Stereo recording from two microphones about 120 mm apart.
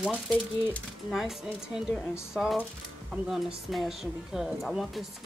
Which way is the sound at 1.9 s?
5° right (ahead or behind).